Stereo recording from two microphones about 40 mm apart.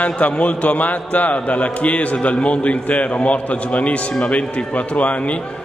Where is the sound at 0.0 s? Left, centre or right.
Left.